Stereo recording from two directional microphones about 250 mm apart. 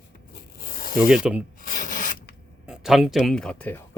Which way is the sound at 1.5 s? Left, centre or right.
Left.